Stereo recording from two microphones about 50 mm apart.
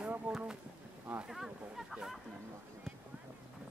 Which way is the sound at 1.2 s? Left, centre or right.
Centre.